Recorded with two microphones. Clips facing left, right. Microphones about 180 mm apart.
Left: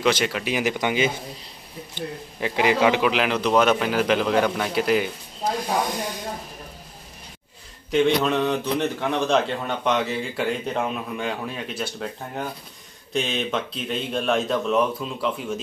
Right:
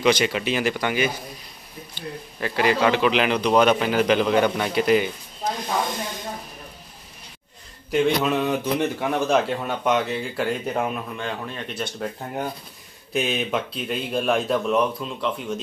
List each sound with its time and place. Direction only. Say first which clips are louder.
0.0 s a man's voice: right 2 dB; centre (ahead or behind)
0.5 s a man's voice: even; 15° left (ahead or behind)
7.9 s a man's voice: left 1 dB; 5° right (ahead or behind)
11.1 s speech: left 2 dB; 10° left (ahead or behind)
13.1 s a man's voice: right 1 dB; 5° right (ahead or behind)